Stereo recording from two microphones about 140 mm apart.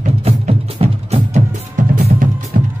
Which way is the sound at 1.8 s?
65° right (ahead or behind).